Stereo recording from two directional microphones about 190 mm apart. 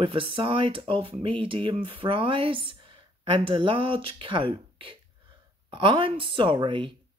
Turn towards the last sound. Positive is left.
turn(degrees=-25)  # may be behind; listen again after turning